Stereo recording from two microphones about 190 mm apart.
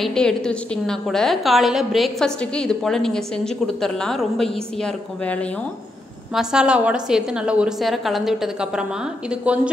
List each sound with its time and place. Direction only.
0.0 s a woman's voice: 5° left (ahead or behind)
6.3 s a woman's voice: 5° right (ahead or behind)